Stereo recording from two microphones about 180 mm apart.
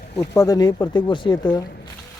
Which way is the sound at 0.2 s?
20° left (ahead or behind).